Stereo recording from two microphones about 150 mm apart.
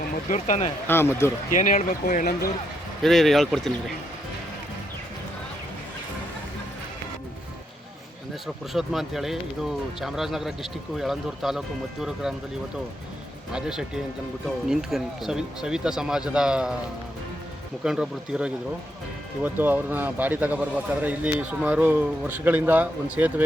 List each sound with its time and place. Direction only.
0.3 s speech: 50° left (ahead or behind)
0.9 s speech: 15° left (ahead or behind)
1.5 s speech: 60° left (ahead or behind)
3.0 s speech: centre (ahead or behind)
8.7 s speech: centre (ahead or behind)
13.5 s speech: 5° right (ahead or behind)
17.8 s a man's voice: 5° right (ahead or behind)